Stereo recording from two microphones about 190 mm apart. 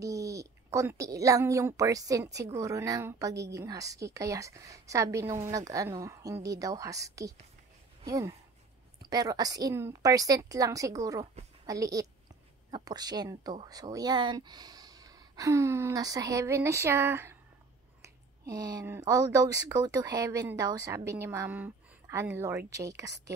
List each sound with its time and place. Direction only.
0.0 s speech: 15° right (ahead or behind)
18.4 s speech: 20° right (ahead or behind)